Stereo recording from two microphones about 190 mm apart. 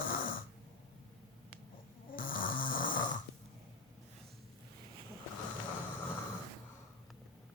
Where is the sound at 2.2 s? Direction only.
45° left (ahead or behind).